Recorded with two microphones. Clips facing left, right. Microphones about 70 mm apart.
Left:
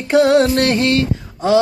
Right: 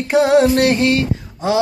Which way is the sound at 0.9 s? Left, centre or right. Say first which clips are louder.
Left 1 dB; centre.